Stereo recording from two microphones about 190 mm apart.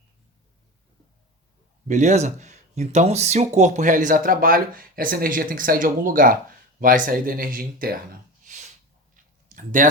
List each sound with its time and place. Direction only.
1.9 s speech: 40° right (ahead or behind)
8.5 s a sound: 40° right (ahead or behind)
9.6 s speech: 45° right (ahead or behind)